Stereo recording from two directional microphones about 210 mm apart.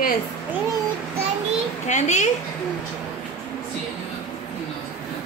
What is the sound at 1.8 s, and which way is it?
Speech, 35° left (ahead or behind).